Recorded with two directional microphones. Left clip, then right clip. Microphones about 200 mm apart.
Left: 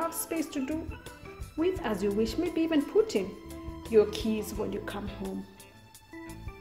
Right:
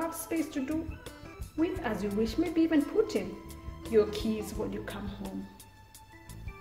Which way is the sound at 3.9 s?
30° left (ahead or behind).